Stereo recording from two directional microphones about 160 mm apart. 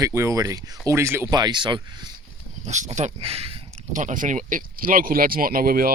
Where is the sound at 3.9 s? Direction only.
55° right (ahead or behind).